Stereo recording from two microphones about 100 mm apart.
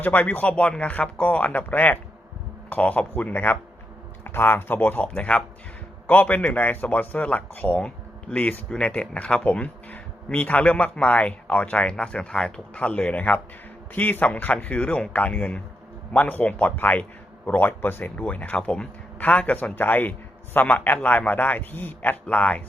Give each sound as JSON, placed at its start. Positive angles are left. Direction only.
{"t": 0.0, "sound": "speech", "side_deg": 15}